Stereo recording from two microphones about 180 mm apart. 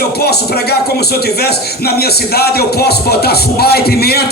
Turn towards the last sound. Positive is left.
turn(degrees=60)  # may be behind; listen again after turning